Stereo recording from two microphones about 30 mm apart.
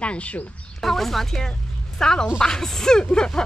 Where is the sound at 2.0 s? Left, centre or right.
Left.